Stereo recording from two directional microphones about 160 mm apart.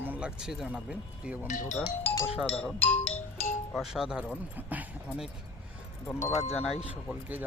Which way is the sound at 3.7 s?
Centre (ahead or behind).